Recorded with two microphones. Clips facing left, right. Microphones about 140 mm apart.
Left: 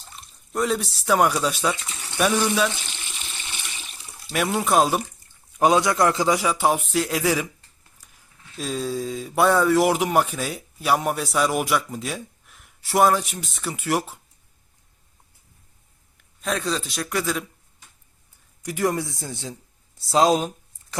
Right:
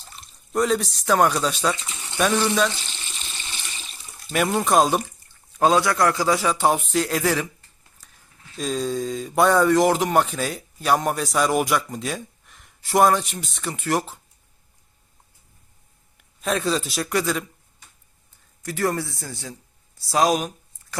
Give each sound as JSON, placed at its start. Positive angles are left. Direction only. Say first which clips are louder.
{"t": 0.2, "sound": "speech", "louder": "right 3 dB", "side_deg": 0}
{"t": 2.1, "sound": "water", "louder": "right 1 dB", "side_deg": 10}
{"t": 4.2, "sound": "speech", "louder": "right 2 dB", "side_deg": 0}
{"t": 5.5, "sound": "a man's voice", "louder": "even", "side_deg": 20}
{"t": 8.0, "sound": "a sound", "louder": "right 1 dB", "side_deg": 10}
{"t": 8.5, "sound": "speech", "louder": "right 2 dB", "side_deg": 5}
{"t": 16.4, "sound": "speech", "louder": "right 3 dB", "side_deg": 0}
{"t": 18.6, "sound": "a man's voice", "louder": "left 1 dB", "side_deg": 15}